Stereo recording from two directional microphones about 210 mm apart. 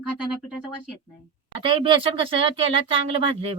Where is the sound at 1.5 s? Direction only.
25° right (ahead or behind).